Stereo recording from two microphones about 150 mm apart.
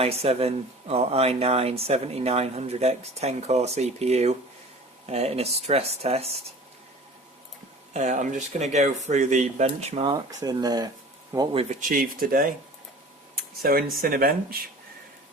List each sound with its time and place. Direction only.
0.0 s speech: 40° right (ahead or behind)
7.9 s speech: 55° right (ahead or behind); by 10.2 s 35° right (ahead or behind)
10.2 s speech: 25° right (ahead or behind)
11.8 s speech: 65° right (ahead or behind)
13.3 s a sound: 80° right
14.0 s speech: 75° right (ahead or behind)